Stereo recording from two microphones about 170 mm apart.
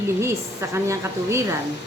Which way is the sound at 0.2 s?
15° right (ahead or behind).